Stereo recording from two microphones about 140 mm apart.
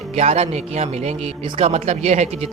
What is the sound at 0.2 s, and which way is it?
A man's voice, 50° right (ahead or behind).